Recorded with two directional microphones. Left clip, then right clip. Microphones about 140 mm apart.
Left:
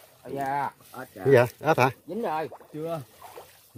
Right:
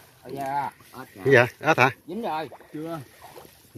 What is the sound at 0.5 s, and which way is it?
Speech, 45° right (ahead or behind).